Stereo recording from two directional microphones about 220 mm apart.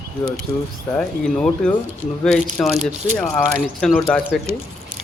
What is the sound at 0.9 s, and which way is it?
Speech, 5° left (ahead or behind).